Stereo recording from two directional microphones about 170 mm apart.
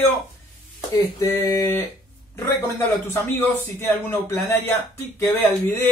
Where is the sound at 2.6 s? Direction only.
15° left (ahead or behind).